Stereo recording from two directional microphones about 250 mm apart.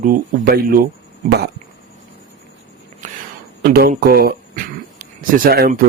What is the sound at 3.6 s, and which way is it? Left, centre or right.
Speech, right.